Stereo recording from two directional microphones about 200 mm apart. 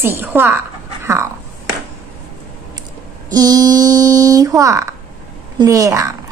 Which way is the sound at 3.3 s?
20° right (ahead or behind).